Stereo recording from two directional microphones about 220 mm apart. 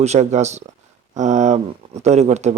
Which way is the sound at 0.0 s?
30° right (ahead or behind).